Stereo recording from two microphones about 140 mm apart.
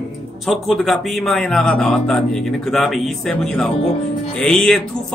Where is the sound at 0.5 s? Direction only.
Centre (ahead or behind).